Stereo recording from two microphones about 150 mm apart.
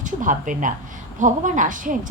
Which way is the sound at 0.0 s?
60° right (ahead or behind).